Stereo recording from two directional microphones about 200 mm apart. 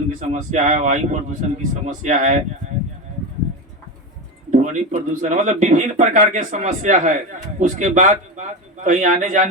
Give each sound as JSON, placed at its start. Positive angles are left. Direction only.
{"t": 0.1, "sound": "speech", "side_deg": -35}
{"t": 4.5, "sound": "speech", "side_deg": -40}